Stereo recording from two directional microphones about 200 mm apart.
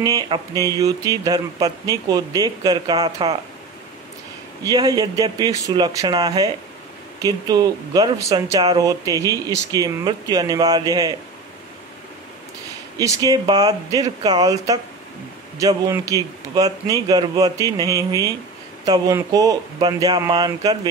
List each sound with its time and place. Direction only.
0.0 s speech: 20° right (ahead or behind)
4.6 s speech: 20° right (ahead or behind)
12.9 s a man's voice: 15° right (ahead or behind)